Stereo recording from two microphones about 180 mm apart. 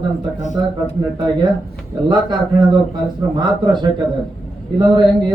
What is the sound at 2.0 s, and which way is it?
A man's voice, 25° right (ahead or behind).